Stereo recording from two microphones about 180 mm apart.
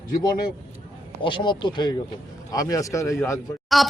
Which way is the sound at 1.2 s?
25° left (ahead or behind).